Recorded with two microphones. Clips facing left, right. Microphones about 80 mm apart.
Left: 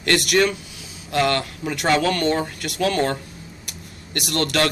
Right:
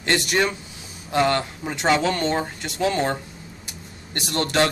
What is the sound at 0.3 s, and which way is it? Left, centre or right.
A man's voice, right.